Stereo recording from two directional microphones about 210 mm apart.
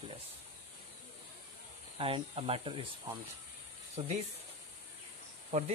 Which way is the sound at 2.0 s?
25° right (ahead or behind).